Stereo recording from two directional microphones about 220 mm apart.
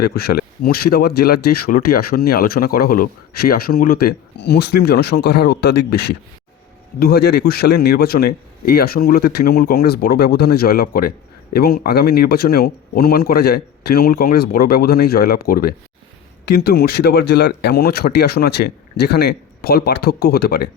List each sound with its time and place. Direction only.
0.0 s speech: 45° left (ahead or behind)